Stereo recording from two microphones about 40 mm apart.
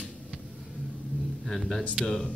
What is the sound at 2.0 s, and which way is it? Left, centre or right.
Speech, left.